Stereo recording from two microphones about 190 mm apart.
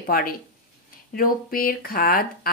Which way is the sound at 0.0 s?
50° left (ahead or behind).